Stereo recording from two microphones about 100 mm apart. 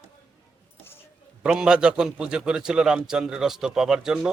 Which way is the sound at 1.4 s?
10° right (ahead or behind).